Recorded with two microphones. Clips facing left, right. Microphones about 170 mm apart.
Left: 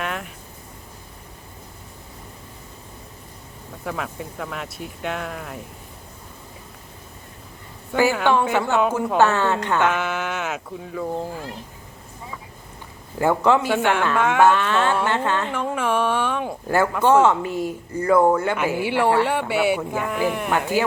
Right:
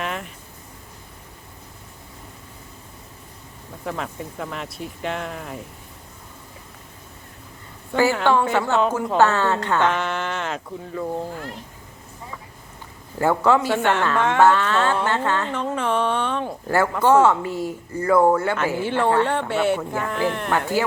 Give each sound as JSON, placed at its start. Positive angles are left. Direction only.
{"t": 0.0, "sound": "a sound", "side_deg": 0}
{"t": 3.8, "sound": "speech", "side_deg": 0}
{"t": 8.1, "sound": "speech", "side_deg": 15}
{"t": 13.1, "sound": "speech", "side_deg": 20}